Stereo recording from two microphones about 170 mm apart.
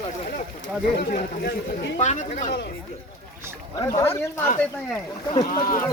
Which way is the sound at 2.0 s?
45° left (ahead or behind).